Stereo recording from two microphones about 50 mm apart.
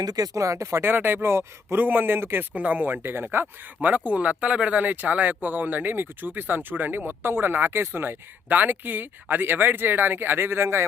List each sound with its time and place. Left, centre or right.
0.3 s speech: right
0.8 s speech: right
1.2 s speech: right
1.8 s speech: right
2.6 s speech: right
3.8 s speech: right